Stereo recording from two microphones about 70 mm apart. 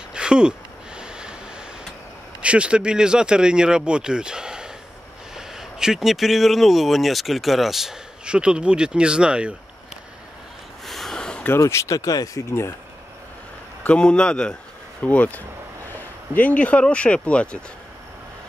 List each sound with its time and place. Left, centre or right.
0.1 s a sound: centre
2.4 s speech: centre
10.9 s a sound: centre
11.5 s speech: left
13.8 s speech: centre
15.0 s speech: left